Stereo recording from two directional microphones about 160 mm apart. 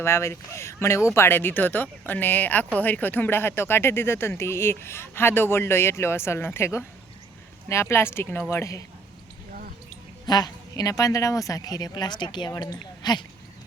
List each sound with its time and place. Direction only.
0.0 s speech: 15° left (ahead or behind)
10.2 s a woman's voice: 25° left (ahead or behind)